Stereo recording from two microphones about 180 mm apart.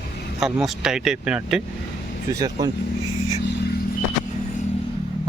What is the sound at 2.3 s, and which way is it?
Speech, 20° right (ahead or behind).